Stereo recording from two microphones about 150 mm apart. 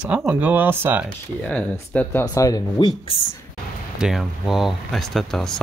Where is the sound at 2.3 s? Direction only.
25° left (ahead or behind).